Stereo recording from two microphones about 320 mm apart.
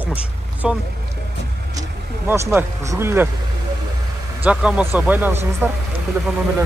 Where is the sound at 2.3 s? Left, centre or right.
Centre.